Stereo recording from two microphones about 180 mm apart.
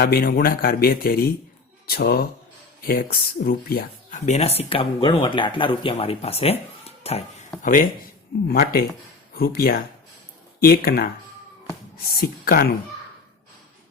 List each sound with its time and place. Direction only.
0.0 s speech: 60° left (ahead or behind)
4.3 s speech: 35° left (ahead or behind)
7.6 s speech: 50° left (ahead or behind)
12.2 s speech: 55° left (ahead or behind)